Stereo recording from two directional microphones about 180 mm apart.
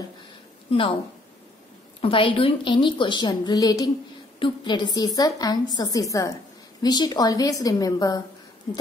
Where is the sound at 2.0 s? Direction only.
30° left (ahead or behind).